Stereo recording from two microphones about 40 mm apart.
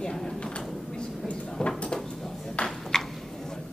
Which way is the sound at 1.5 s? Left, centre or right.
Left.